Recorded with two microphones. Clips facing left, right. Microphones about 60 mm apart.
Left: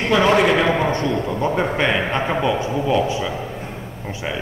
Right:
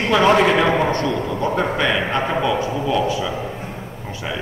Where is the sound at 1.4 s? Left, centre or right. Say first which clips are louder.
Even; left.